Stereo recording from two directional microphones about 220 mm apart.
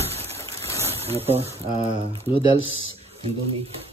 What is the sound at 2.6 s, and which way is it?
Speech, 65° left (ahead or behind).